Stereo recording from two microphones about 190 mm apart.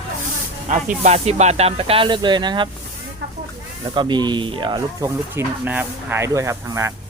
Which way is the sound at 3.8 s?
25° right (ahead or behind).